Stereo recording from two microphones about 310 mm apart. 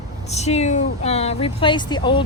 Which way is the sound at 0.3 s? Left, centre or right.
Left.